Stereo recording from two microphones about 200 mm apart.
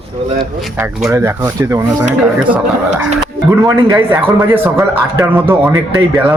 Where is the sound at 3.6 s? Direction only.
15° right (ahead or behind).